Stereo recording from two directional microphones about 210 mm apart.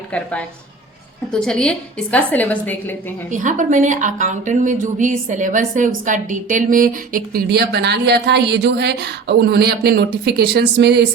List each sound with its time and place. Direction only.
0.1 s a woman's voice: 5° left (ahead or behind)
3.2 s a woman's voice: 35° right (ahead or behind); by 11.0 s 50° right (ahead or behind)